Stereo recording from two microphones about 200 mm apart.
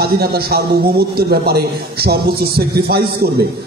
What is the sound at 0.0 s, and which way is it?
A man's voice, 50° right (ahead or behind).